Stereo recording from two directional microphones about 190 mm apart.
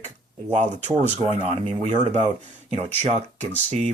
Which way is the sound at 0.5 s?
35° right (ahead or behind).